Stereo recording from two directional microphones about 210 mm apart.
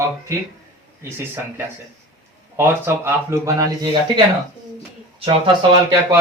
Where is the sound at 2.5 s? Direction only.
10° right (ahead or behind).